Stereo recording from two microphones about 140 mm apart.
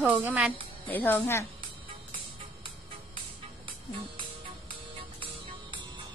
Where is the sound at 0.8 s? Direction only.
15° left (ahead or behind).